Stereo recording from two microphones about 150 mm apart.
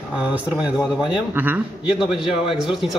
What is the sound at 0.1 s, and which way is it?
A man's voice, 10° right (ahead or behind).